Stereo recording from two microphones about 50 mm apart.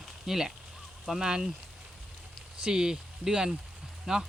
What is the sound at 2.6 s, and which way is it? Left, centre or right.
Speech, centre.